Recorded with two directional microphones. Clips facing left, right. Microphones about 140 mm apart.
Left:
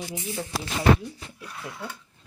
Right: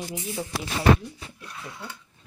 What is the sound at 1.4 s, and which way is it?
Speech, 5° left (ahead or behind).